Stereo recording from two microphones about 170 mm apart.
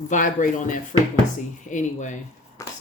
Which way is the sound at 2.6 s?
20° left (ahead or behind).